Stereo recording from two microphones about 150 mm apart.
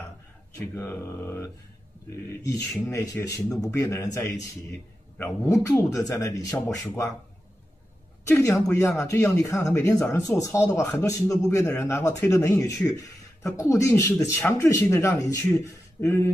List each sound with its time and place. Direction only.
0.6 s speech: 15° left (ahead or behind)
8.3 s speech: 20° left (ahead or behind)